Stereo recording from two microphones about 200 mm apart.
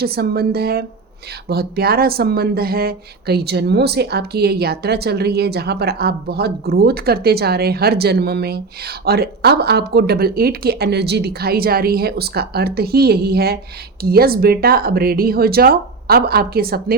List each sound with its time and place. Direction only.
0.0 s speech: 50° right (ahead or behind)